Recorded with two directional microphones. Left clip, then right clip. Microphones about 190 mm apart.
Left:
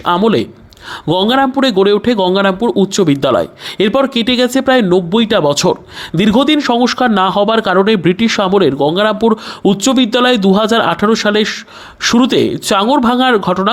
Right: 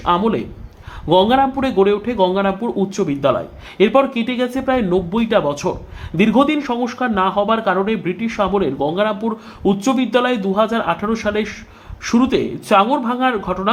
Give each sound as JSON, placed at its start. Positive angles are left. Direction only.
{"t": 0.0, "sound": "speech", "side_deg": 35}